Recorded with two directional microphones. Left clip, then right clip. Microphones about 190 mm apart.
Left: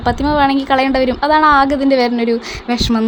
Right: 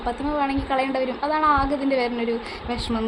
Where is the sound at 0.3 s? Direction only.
45° left (ahead or behind).